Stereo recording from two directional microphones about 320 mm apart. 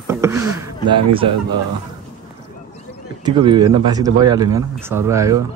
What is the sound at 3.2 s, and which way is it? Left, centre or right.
Speech, centre.